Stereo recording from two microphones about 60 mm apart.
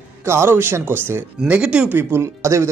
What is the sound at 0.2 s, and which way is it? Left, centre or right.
Speech, right.